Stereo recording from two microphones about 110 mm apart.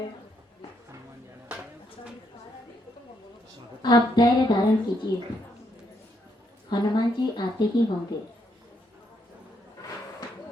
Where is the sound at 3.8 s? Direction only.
40° left (ahead or behind).